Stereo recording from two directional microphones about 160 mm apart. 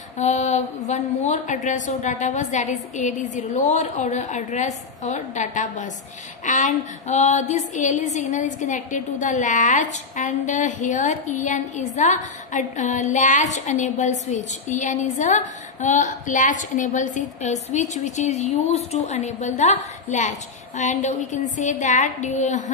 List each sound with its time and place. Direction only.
0.2 s a woman's voice: 45° left (ahead or behind)